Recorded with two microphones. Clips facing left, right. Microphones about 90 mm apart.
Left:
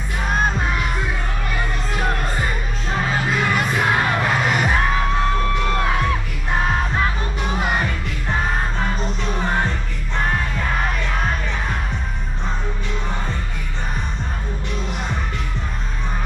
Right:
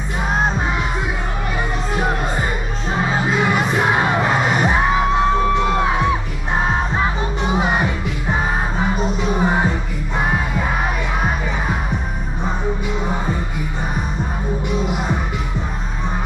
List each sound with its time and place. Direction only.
0.3 s music: 5° right (ahead or behind)
13.0 s music: 10° right (ahead or behind)
14.7 s music: 10° right (ahead or behind)